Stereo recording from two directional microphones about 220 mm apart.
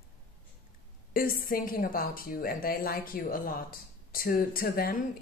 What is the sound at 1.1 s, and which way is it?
A woman's voice, 40° left (ahead or behind).